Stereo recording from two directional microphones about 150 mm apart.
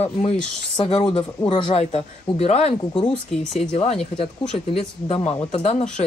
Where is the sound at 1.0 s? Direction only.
30° left (ahead or behind).